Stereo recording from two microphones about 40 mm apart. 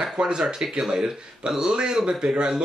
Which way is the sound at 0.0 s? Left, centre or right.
Right.